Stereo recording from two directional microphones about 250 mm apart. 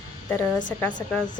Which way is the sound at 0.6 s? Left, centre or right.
Centre.